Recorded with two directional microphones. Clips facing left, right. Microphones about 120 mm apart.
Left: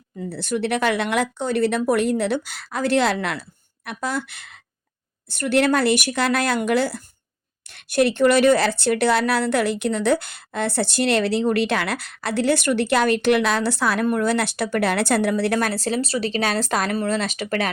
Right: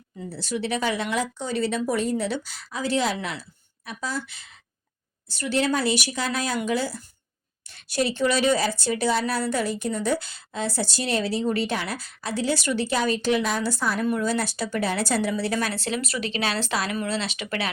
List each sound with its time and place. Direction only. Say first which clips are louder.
0.3 s speech: left 4 dB; 60° left (ahead or behind); by 14.1 s 80° left
14.1 s speech: left 4 dB; 65° left (ahead or behind)
15.7 s speech: left 5 dB; 40° left (ahead or behind)